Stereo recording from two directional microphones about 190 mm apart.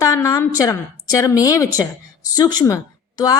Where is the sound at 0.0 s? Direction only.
15° left (ahead or behind).